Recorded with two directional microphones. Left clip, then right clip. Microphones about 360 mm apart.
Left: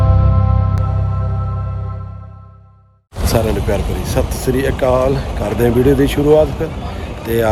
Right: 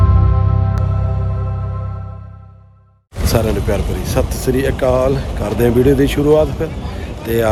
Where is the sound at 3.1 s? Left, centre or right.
Centre.